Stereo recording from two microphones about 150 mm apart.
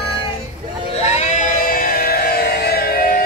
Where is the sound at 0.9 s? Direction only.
45° left (ahead or behind); by 3.2 s 85° left.